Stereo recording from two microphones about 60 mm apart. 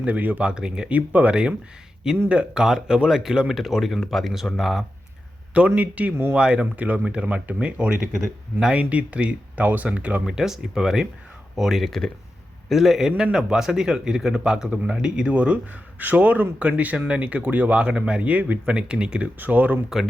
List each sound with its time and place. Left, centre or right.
0.0 s speech: right
0.4 s speech: centre
5.5 s speech: right
10.2 s speech: centre
11.9 s speech: centre
19.4 s speech: right